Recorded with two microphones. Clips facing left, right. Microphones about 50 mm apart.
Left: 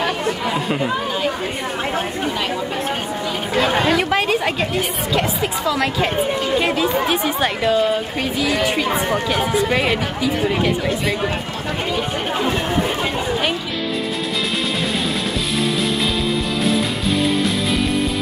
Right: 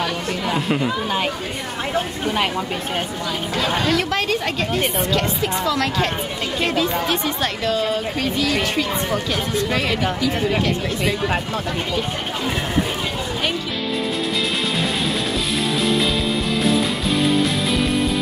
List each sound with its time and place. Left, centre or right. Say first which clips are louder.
0.5 s chatter: right 3 dB; centre
3.5 s speech: left 4 dB; left